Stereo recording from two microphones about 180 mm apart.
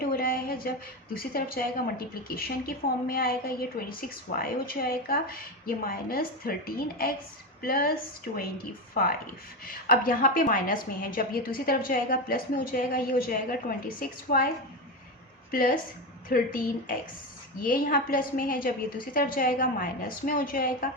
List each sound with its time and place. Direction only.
0.0 s a sound: 55° left (ahead or behind)
1.1 s a woman's voice: 55° left (ahead or behind)
9.6 s a woman's voice: 55° left (ahead or behind)
15.5 s a woman's voice: 50° left (ahead or behind)